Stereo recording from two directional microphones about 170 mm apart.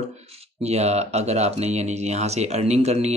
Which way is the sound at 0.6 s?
40° right (ahead or behind).